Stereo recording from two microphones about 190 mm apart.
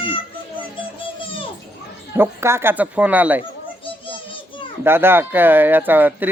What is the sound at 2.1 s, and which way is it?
Speech, 15° right (ahead or behind).